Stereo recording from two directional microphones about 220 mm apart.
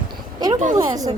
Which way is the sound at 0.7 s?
15° right (ahead or behind).